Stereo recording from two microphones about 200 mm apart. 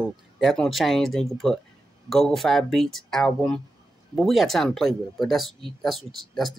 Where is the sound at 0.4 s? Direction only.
Centre (ahead or behind).